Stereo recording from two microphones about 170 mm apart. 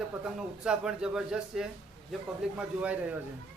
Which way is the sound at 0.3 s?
5° right (ahead or behind).